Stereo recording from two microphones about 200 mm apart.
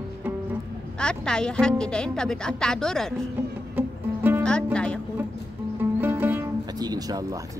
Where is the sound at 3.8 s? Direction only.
10° right (ahead or behind).